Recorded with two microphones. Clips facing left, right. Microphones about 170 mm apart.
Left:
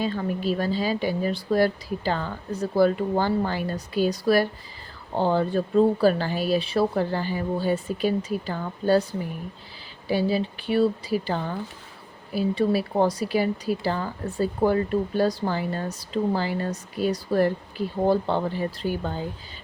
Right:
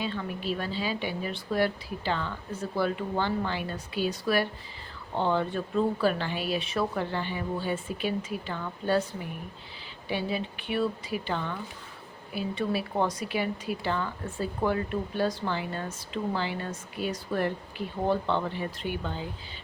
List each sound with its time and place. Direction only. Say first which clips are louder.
0.0 s speech: left 6 dB; 40° left (ahead or behind)
10.1 s speech: left 7 dB; 35° left (ahead or behind)